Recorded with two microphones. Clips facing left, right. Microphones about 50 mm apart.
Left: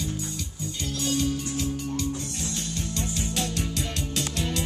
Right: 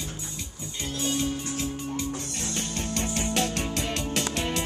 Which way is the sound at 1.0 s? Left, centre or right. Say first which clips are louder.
Left 2 dB; right.